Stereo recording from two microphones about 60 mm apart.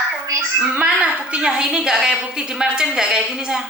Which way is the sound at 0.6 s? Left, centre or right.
Centre.